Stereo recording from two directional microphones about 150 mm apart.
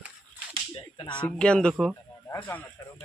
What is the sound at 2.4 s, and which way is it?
Speech, 15° left (ahead or behind).